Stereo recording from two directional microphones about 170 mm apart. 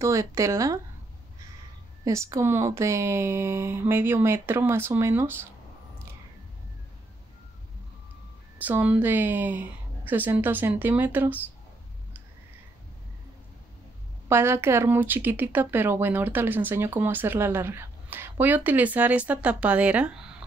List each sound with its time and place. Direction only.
0.0 s speech: 20° right (ahead or behind)
2.0 s speech: 20° right (ahead or behind)
8.5 s speech: 10° right (ahead or behind)
14.3 s speech: 15° right (ahead or behind)